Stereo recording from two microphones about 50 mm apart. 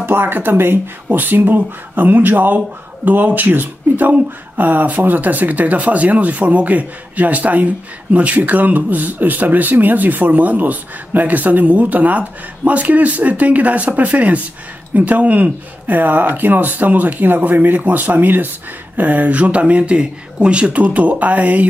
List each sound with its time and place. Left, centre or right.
0.0 s speech: right